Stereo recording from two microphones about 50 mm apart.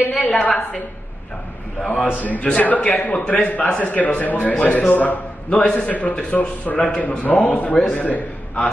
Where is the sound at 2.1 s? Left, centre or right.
Left.